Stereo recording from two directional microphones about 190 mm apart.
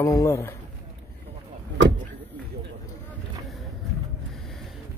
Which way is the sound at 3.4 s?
Centre (ahead or behind).